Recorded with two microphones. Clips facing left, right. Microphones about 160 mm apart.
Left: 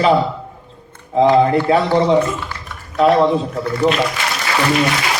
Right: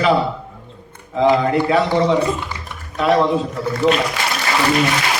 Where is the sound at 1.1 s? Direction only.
35° left (ahead or behind).